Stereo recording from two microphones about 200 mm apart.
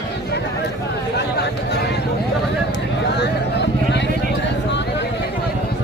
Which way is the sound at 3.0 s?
55° left (ahead or behind).